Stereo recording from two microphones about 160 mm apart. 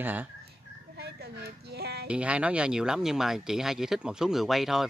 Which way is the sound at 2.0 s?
5° right (ahead or behind).